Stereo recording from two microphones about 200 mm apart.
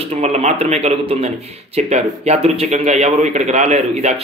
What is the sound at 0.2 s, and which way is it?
A man's voice, 35° right (ahead or behind).